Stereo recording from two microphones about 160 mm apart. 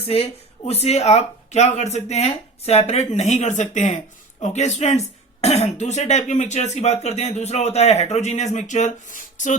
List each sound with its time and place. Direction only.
0.0 s speech: 40° left (ahead or behind)